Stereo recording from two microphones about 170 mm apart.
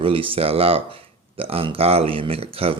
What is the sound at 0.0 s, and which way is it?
Speech, 30° right (ahead or behind).